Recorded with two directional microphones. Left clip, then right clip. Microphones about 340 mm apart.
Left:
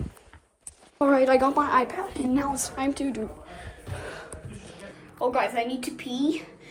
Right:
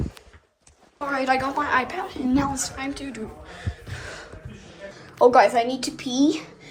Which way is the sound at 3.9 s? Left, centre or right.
Centre.